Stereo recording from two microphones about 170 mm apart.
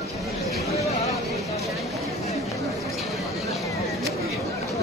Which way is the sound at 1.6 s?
Centre (ahead or behind).